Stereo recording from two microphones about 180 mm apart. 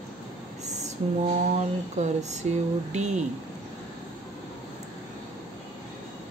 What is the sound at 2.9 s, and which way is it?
Speech, 40° right (ahead or behind).